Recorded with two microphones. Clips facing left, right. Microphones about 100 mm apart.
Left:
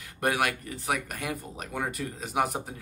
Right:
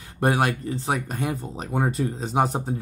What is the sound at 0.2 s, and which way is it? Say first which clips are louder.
Speech: right 5 dB; 30° right (ahead or behind).